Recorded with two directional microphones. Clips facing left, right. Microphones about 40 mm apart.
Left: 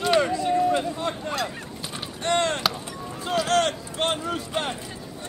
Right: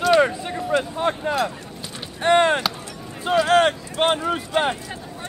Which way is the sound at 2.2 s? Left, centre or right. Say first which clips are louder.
Right 7 dB; right.